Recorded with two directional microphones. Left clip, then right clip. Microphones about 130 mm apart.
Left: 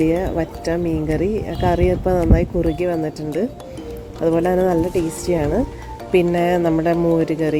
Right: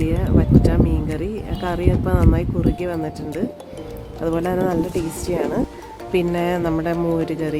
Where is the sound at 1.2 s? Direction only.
15° left (ahead or behind).